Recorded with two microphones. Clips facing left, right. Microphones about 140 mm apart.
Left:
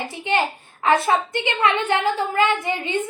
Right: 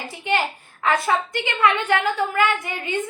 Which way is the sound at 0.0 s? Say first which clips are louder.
Even; 20° left (ahead or behind).